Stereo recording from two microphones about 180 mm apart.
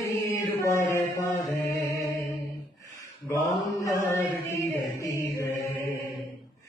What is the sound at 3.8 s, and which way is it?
Chant, 15° left (ahead or behind).